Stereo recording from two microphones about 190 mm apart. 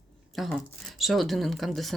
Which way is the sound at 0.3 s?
Centre (ahead or behind).